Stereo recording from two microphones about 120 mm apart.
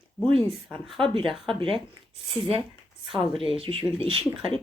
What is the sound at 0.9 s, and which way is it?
Speech, 45° right (ahead or behind).